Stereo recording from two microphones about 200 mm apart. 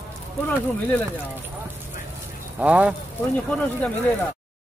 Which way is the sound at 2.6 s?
5° right (ahead or behind).